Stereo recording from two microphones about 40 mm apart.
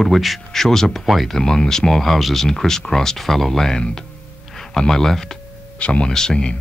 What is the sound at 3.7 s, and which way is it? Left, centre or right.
Speech, centre.